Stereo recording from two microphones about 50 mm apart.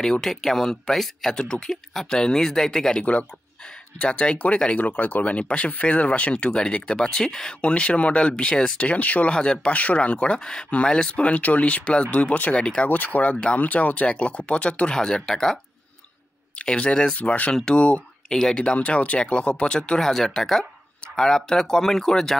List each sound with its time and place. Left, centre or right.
0.0 s speech: centre
3.0 s speech: left
4.7 s speech: left
9.3 s speech: centre
12.9 s speech: left; by 15.6 s centre
16.5 s speech: left